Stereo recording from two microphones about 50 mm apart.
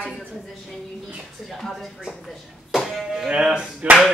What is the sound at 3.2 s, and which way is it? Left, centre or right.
Speech, centre.